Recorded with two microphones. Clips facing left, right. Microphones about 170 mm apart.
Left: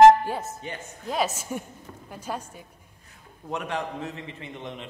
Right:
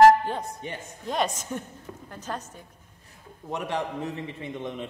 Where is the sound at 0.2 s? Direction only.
5° left (ahead or behind).